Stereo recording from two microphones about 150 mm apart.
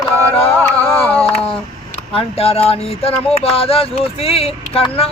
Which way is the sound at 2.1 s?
40° left (ahead or behind).